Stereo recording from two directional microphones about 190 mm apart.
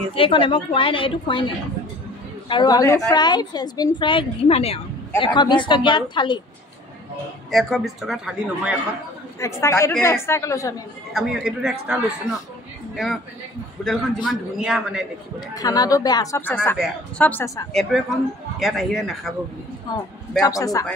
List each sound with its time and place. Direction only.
0.1 s a woman's voice: 25° left (ahead or behind)
2.4 s a woman's voice: 25° left (ahead or behind)
7.5 s a man's voice: centre (ahead or behind)
9.4 s a woman's voice: 15° left (ahead or behind)
11.1 s a man's voice: centre (ahead or behind)
15.5 s a woman's voice: 20° left (ahead or behind)
17.9 s a man's voice: centre (ahead or behind)
20.3 s a woman's voice: 20° left (ahead or behind)